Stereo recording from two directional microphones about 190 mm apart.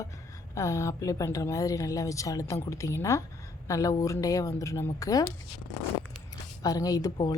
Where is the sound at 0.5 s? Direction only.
15° left (ahead or behind).